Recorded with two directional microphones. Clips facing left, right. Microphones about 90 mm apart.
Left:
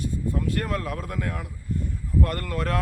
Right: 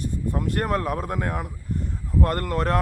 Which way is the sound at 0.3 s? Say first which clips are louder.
Right 5 dB; 40° right (ahead or behind).